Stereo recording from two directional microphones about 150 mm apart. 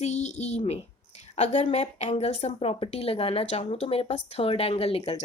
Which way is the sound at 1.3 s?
50° left (ahead or behind).